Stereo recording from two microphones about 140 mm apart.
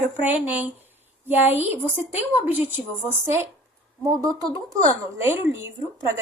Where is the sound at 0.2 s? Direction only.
10° right (ahead or behind).